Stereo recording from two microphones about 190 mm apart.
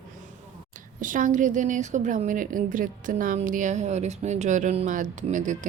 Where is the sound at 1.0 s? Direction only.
45° right (ahead or behind).